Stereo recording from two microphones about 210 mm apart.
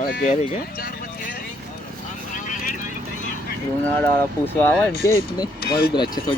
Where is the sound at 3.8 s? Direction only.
10° left (ahead or behind).